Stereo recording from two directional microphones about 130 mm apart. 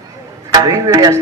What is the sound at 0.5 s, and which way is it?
Speech, 30° right (ahead or behind).